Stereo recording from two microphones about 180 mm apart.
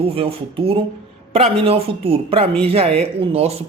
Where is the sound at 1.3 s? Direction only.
35° right (ahead or behind).